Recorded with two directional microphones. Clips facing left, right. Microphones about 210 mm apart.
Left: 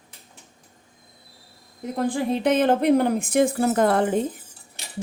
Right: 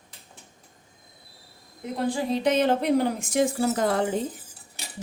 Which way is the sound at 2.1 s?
55° left (ahead or behind).